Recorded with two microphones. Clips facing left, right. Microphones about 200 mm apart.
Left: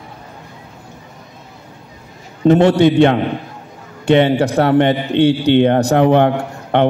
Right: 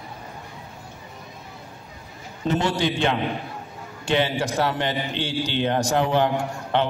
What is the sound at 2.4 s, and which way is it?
A man's voice, 60° left (ahead or behind).